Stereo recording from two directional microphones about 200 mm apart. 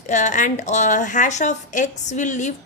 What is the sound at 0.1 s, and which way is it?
Speech, 35° left (ahead or behind).